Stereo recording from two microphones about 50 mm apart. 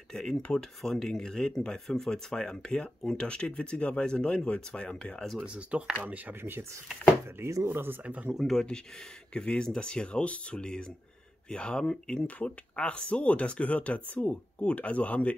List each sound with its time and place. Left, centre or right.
0.1 s speech: centre
5.4 s speech: right
7.3 s speech: right
7.6 s speech: right
8.0 s speech: right
8.5 s speech: centre
12.4 s speech: left